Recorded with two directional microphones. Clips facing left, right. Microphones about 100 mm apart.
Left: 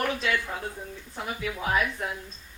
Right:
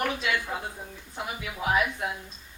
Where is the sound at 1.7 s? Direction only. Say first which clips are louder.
Right 2 dB; 15° right (ahead or behind).